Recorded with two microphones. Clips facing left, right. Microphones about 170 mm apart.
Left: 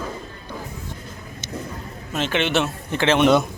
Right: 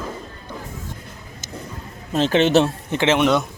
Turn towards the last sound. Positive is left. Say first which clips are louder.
# left 2 dB
turn(degrees=0)  # may be behind; listen again after turning